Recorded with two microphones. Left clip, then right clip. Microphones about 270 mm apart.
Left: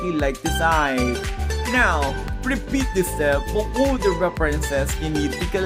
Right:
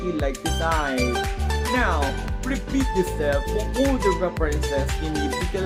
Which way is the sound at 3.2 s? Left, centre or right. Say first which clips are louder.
Left 3 dB; left.